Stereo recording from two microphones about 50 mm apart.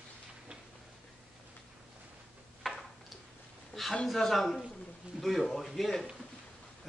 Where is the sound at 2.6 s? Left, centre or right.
Centre.